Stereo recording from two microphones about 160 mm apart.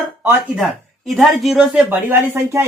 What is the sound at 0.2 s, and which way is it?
Speech, 5° right (ahead or behind).